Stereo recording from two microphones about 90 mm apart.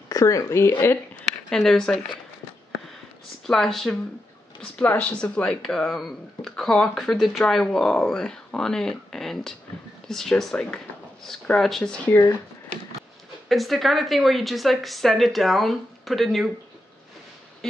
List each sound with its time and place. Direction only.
0.1 s speech: 35° left (ahead or behind)
1.2 s speech: 5° left (ahead or behind)
3.4 s speech: 5° left (ahead or behind)
12.1 s speech: 40° left (ahead or behind)
13.5 s speech: centre (ahead or behind)